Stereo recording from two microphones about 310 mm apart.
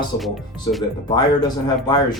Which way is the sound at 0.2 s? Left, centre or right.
Centre.